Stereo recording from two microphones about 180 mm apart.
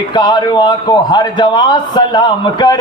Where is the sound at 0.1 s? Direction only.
25° left (ahead or behind).